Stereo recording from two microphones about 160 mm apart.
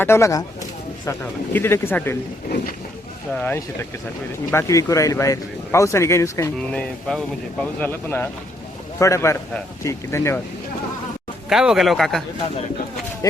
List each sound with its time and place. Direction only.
0.0 s speech: 15° left (ahead or behind)
3.3 s speech: 15° left (ahead or behind)
6.7 s speech: 5° left (ahead or behind)
11.4 s a man's voice: 5° right (ahead or behind)